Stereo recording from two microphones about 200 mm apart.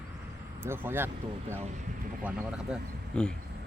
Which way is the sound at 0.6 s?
10° right (ahead or behind).